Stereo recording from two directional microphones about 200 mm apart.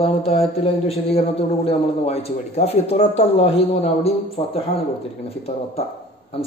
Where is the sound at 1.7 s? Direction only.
30° left (ahead or behind).